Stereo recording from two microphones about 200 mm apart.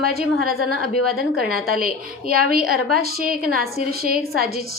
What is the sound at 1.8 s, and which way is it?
A woman's voice, 45° right (ahead or behind).